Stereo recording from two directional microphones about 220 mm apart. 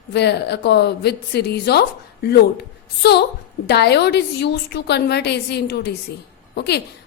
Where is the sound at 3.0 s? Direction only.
45° left (ahead or behind).